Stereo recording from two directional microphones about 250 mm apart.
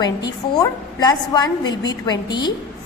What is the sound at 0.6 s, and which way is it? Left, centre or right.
A woman's voice, centre.